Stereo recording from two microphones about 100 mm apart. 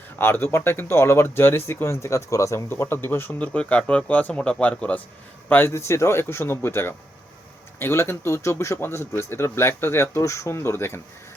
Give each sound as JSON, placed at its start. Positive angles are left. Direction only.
{"t": 0.2, "sound": "speech", "side_deg": 20}